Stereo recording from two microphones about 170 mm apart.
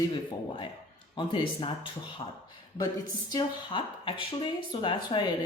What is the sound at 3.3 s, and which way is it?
Speech, 25° left (ahead or behind).